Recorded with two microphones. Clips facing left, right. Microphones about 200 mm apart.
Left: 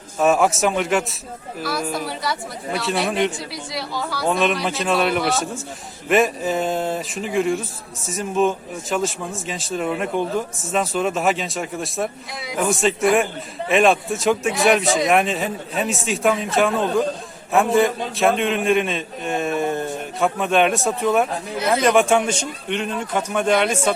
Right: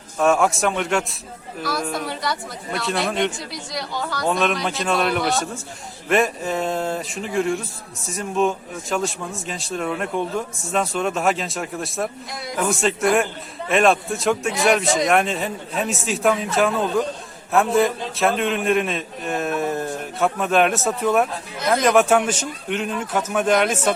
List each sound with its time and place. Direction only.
0.2 s a man's voice: 5° left (ahead or behind)